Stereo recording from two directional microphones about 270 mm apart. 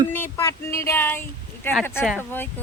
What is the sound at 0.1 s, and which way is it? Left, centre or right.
Speech, centre.